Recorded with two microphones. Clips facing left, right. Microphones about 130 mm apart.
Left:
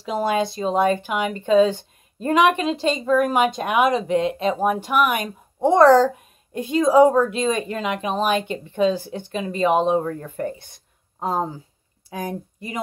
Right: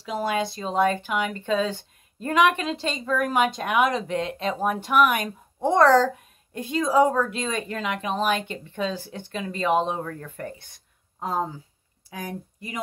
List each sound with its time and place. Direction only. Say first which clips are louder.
0.0 s a woman's voice: left 4 dB; 25° left (ahead or behind)